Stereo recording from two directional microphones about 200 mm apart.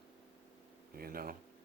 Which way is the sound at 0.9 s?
45° right (ahead or behind).